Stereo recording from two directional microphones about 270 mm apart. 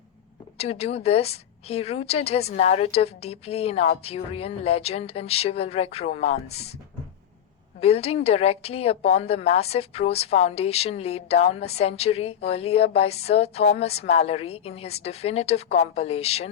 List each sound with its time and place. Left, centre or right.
0.6 s a woman's voice: left
7.8 s a woman's voice: left